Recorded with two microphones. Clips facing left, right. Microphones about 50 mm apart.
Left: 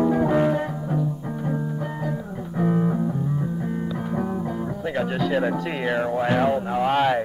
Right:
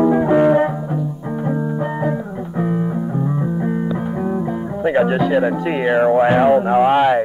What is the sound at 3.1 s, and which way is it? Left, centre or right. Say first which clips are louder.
Music: right 6 dB; right.